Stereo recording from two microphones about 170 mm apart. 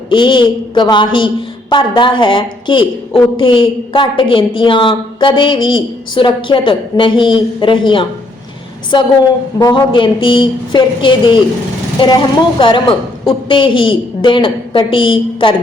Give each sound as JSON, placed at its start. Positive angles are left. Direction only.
{"t": 0.1, "sound": "a woman's voice", "side_deg": 30}